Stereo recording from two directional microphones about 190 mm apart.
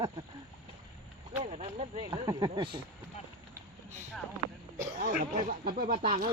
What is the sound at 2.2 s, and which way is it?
Speech, 20° right (ahead or behind).